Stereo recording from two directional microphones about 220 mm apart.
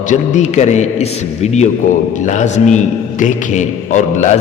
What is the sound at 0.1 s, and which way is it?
A man's voice, 35° left (ahead or behind).